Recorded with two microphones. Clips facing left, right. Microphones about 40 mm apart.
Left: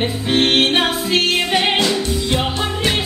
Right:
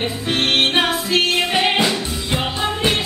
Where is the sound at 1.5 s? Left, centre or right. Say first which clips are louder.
Left 1 dB; centre.